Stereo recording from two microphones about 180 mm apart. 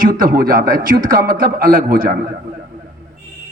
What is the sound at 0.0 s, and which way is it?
A man's voice, 50° right (ahead or behind).